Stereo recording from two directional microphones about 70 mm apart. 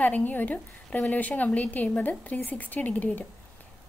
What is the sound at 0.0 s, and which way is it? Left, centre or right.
Speech, left.